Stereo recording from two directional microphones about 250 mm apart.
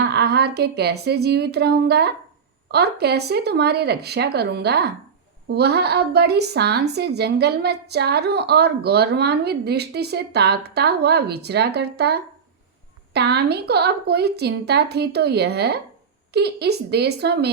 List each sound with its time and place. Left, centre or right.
0.0 s a woman's voice: right